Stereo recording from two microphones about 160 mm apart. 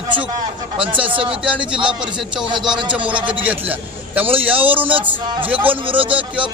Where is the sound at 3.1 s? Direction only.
30° right (ahead or behind).